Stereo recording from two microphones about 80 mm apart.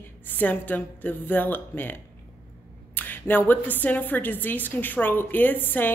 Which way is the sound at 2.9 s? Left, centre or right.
Left.